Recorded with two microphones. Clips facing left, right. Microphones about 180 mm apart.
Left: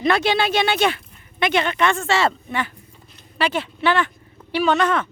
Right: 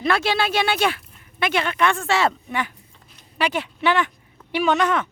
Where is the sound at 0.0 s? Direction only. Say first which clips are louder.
Left 2 dB; 5° right (ahead or behind).